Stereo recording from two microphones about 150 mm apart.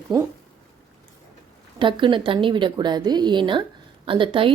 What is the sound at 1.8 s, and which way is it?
A woman's voice, 35° right (ahead or behind).